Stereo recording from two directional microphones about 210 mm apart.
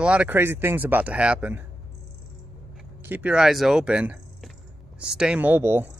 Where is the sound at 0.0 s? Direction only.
5° right (ahead or behind).